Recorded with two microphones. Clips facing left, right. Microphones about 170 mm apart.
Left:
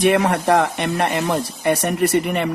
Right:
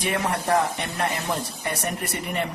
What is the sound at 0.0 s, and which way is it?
Speech, 75° left (ahead or behind).